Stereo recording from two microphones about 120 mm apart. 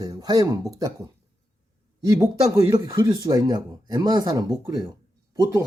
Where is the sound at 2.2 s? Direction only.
30° right (ahead or behind).